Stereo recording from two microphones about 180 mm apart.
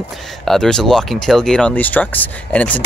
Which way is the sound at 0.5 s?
5° left (ahead or behind).